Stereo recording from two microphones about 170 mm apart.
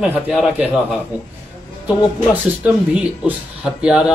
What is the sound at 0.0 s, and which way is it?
Speech, centre (ahead or behind).